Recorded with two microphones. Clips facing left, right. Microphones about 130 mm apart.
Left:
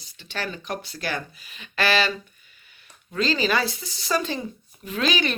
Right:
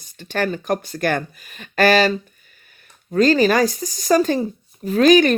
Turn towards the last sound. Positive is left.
turn(degrees=-45)  # may be behind; listen again after turning